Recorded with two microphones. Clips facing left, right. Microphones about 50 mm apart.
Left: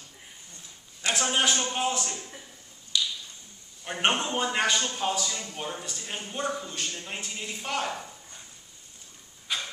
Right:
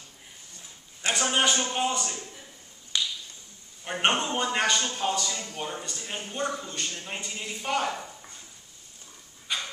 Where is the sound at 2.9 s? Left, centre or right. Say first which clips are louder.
Left 1 dB; right.